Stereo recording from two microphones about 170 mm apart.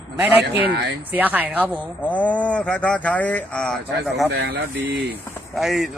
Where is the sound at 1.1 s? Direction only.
10° right (ahead or behind).